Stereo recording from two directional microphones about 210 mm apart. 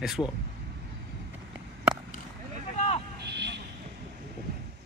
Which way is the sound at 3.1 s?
55° right (ahead or behind).